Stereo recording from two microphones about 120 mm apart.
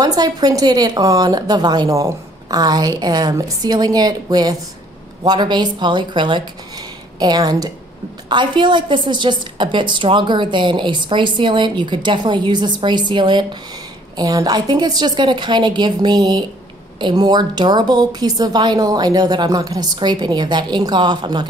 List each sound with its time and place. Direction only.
0.0 s a woman's voice: 35° right (ahead or behind)